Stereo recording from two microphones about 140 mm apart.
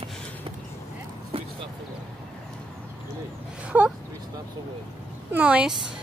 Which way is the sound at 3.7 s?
10° right (ahead or behind).